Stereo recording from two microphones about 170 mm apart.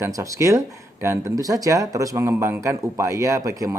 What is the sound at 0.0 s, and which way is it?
Speech, 20° right (ahead or behind).